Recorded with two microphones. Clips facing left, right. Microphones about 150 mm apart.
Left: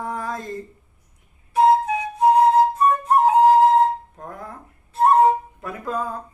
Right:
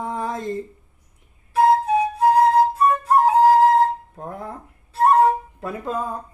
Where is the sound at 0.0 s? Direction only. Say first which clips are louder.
Right 2 dB; 20° right (ahead or behind).